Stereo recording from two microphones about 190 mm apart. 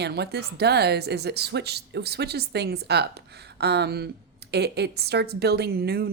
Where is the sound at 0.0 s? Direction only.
60° right (ahead or behind).